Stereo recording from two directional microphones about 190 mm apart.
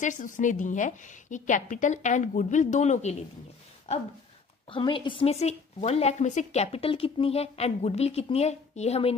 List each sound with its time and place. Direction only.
0.0 s a woman's voice: 40° left (ahead or behind)
4.6 s a woman's voice: 25° left (ahead or behind)